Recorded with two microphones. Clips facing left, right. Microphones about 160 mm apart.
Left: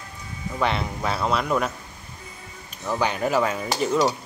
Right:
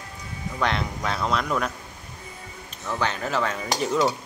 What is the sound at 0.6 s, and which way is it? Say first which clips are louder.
Cutlery: left 1 dB; 5° left (ahead or behind).